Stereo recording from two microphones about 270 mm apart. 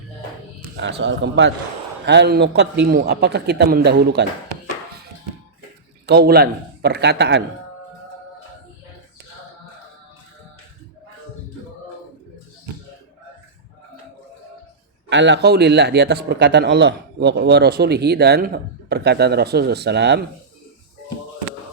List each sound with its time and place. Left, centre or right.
0.8 s a man's voice: right
6.1 s a man's voice: right
15.1 s a man's voice: right